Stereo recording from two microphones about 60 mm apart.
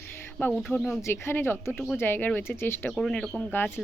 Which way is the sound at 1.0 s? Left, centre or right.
Left.